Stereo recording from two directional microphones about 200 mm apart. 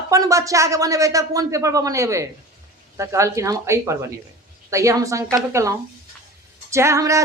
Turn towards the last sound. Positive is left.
turn(degrees=-15)  # may be behind; listen again after turning